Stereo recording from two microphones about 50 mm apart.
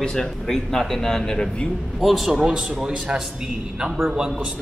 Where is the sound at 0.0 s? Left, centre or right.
Centre.